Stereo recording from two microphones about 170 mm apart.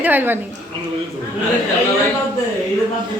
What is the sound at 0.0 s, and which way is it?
Speech, 10° right (ahead or behind).